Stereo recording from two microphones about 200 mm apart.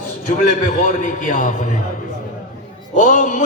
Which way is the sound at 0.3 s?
40° left (ahead or behind).